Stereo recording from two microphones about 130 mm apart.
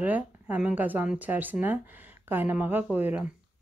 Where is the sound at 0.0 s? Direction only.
10° right (ahead or behind).